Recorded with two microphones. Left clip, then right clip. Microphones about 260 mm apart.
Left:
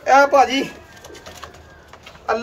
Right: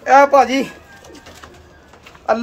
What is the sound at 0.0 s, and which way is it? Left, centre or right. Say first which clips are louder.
Speech: right 2 dB; centre.